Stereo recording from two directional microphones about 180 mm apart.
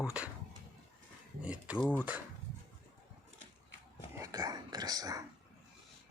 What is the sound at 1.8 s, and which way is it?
Speech, 10° left (ahead or behind).